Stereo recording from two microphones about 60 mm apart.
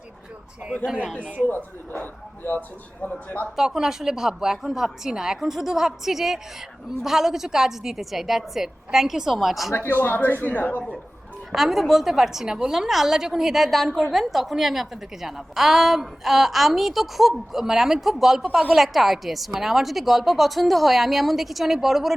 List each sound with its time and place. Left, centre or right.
1.1 s speech: right
1.5 s a man's voice: left
3.5 s a woman's voice: centre
9.7 s speech: left
11.5 s a woman's voice: centre